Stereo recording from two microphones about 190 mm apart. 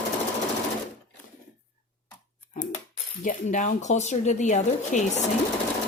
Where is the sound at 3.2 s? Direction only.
40° left (ahead or behind).